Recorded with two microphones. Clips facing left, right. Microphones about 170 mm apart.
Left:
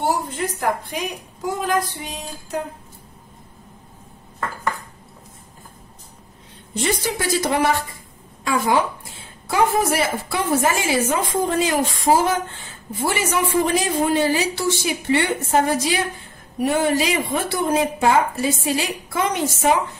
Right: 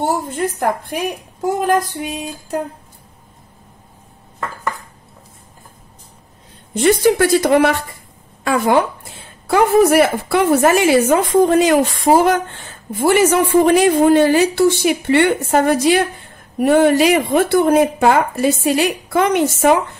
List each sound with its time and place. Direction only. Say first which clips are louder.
0.3 s a woman's voice: right 4 dB; 50° right (ahead or behind)
6.7 s a woman's voice: right 10 dB; 60° right (ahead or behind)